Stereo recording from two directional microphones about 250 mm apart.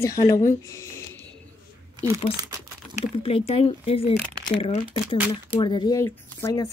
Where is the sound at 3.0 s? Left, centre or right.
Left.